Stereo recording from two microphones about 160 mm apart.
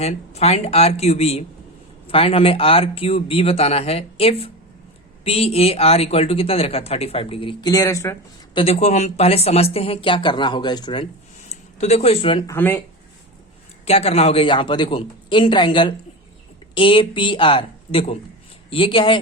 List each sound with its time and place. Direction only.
0.0 s speech: 40° left (ahead or behind)
7.7 s speech: 20° left (ahead or behind)
8.5 s speech: 40° left (ahead or behind)
12.5 s speech: 10° left (ahead or behind)
13.8 s speech: 40° left (ahead or behind)